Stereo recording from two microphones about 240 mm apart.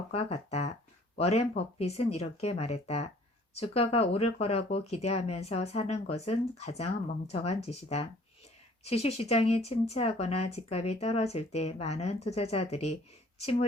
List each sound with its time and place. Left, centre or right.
0.1 s speech: left